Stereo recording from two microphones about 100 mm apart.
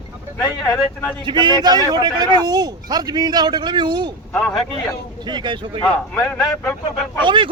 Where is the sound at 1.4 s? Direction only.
45° right (ahead or behind).